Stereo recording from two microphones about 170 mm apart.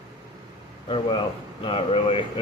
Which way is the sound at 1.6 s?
30° left (ahead or behind).